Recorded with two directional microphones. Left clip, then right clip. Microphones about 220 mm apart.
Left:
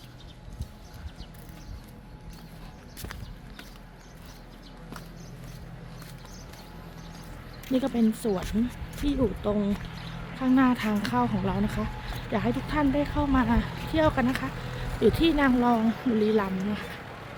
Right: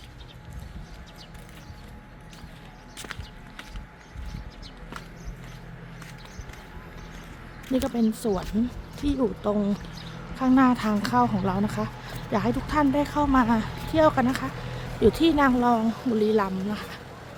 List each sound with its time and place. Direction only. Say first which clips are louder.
7.7 s speech: right 1 dB; 5° right (ahead or behind)
14.5 s vehicle: even; 45° left (ahead or behind)
15.0 s speech: right 3 dB; 10° right (ahead or behind)